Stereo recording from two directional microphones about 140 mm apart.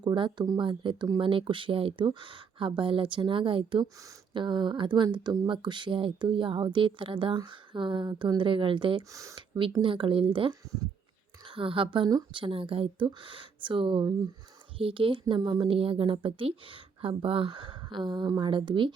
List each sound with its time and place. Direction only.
0.0 s speech: 35° right (ahead or behind)
9.1 s speech: 25° right (ahead or behind)
9.8 s speech: 40° right (ahead or behind)